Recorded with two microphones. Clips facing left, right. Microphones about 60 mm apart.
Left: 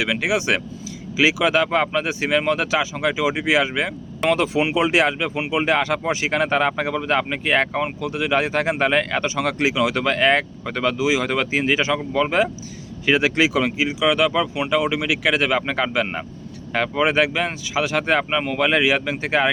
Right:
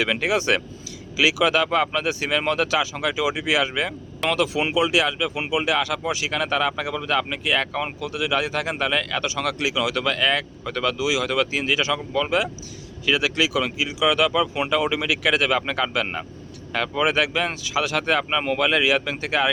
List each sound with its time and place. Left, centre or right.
0.0 s speech: centre
1.1 s speech: left
4.7 s speech: left
10.9 s speech: left
13.1 s speech: left
14.0 s speech: centre